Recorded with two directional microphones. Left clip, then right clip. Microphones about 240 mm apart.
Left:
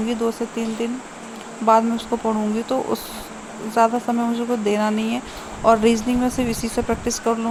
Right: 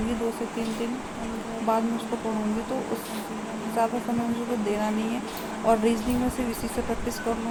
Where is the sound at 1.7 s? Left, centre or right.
Centre.